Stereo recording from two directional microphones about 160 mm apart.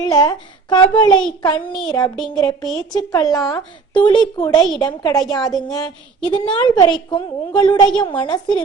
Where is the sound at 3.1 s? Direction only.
20° left (ahead or behind).